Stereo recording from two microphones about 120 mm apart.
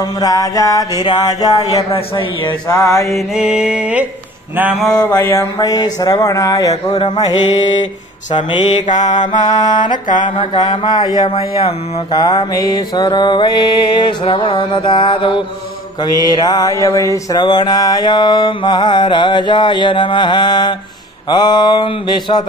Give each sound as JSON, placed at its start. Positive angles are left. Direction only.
{"t": 0.2, "sound": "mantra", "side_deg": 30}
{"t": 1.6, "sound": "speech", "side_deg": 55}
{"t": 2.7, "sound": "mantra", "side_deg": 25}
{"t": 3.2, "sound": "music", "side_deg": -5}
{"t": 5.2, "sound": "mantra", "side_deg": 25}
{"t": 9.0, "sound": "mantra", "side_deg": 90}
{"t": 9.3, "sound": "mantra", "side_deg": 35}
{"t": 10.3, "sound": "speech", "side_deg": 45}
{"t": 10.9, "sound": "mantra", "side_deg": 35}
{"t": 17.4, "sound": "mantra", "side_deg": 40}